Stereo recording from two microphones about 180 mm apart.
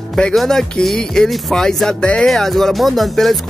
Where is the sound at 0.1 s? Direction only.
Centre (ahead or behind).